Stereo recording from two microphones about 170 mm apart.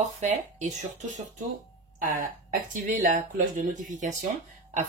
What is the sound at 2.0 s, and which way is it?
Speech, 55° right (ahead or behind).